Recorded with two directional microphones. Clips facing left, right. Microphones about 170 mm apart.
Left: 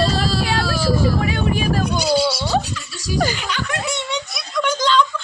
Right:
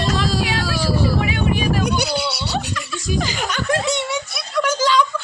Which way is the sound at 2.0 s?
65° right (ahead or behind).